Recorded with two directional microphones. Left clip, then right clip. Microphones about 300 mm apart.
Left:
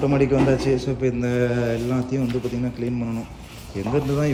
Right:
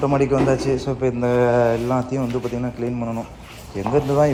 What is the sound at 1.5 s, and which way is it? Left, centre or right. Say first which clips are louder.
A man's voice: right 6 dB; centre.